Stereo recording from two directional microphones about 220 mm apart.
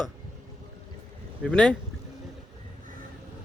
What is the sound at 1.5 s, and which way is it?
Speech, 5° left (ahead or behind).